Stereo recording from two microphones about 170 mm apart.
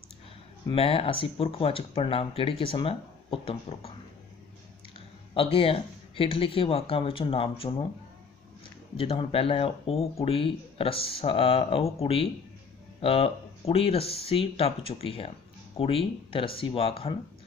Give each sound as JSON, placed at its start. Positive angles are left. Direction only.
{"t": 0.7, "sound": "speech", "side_deg": 35}
{"t": 5.3, "sound": "speech", "side_deg": 35}
{"t": 8.9, "sound": "speech", "side_deg": 35}